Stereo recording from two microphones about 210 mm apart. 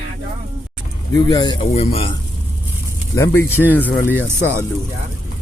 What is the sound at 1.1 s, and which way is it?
Speech, 20° left (ahead or behind).